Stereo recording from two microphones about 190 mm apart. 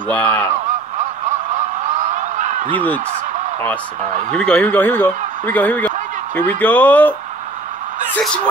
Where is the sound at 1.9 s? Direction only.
40° right (ahead or behind).